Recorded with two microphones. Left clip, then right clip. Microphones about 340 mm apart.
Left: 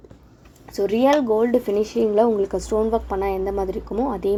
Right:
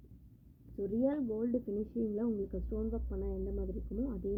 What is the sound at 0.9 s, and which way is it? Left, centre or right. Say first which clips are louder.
A woman's voice: left 18 dB; left.